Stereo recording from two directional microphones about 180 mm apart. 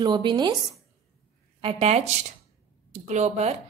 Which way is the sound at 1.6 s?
35° right (ahead or behind).